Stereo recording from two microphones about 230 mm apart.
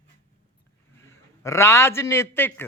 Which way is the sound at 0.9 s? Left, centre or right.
Centre.